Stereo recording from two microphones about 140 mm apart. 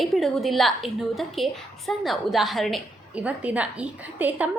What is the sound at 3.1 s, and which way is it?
A woman's voice, 10° right (ahead or behind).